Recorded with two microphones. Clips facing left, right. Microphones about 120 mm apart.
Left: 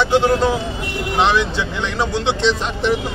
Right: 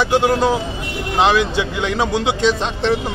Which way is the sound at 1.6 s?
15° right (ahead or behind).